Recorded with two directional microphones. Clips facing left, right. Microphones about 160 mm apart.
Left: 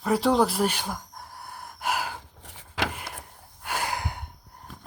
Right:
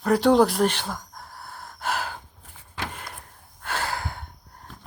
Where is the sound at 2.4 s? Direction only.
85° left.